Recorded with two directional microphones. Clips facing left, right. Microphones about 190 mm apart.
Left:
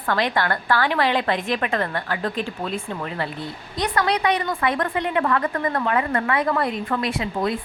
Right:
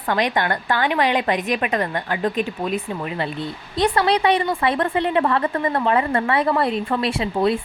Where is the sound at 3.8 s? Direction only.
25° right (ahead or behind).